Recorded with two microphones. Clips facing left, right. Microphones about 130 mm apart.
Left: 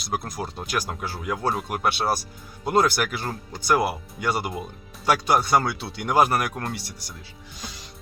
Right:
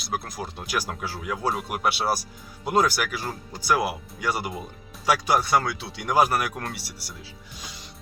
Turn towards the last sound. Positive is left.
turn(degrees=-5)  # may be behind; listen again after turning